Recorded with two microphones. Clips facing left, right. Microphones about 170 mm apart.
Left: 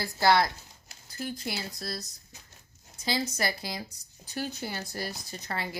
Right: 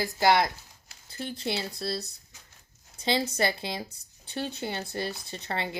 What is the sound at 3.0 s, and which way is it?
Speech, 30° right (ahead or behind).